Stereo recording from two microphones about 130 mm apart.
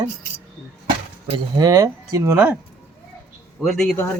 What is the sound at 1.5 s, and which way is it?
Speech, 25° right (ahead or behind).